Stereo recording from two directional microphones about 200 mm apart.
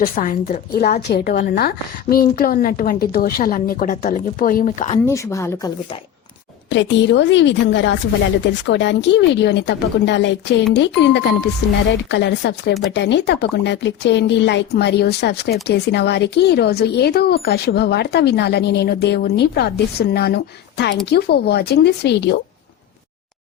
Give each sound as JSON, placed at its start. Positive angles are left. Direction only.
{"t": 0.0, "sound": "a woman's voice", "side_deg": 40}
{"t": 5.0, "sound": "speech", "side_deg": 15}
{"t": 6.7, "sound": "speech", "side_deg": 65}